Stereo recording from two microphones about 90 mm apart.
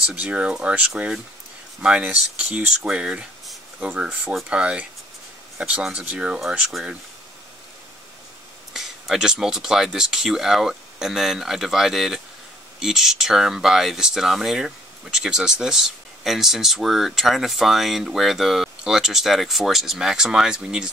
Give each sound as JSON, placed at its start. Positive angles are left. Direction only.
{"t": 0.0, "sound": "speech", "side_deg": -15}
{"t": 8.7, "sound": "speech", "side_deg": -5}